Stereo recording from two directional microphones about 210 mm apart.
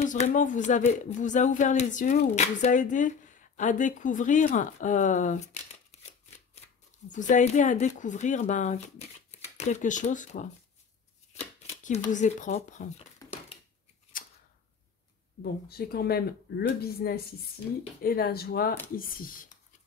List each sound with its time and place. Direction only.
0.0 s speech: 35° left (ahead or behind)
7.1 s speech: 35° left (ahead or behind)
11.8 s speech: 35° left (ahead or behind)
15.4 s speech: 45° left (ahead or behind)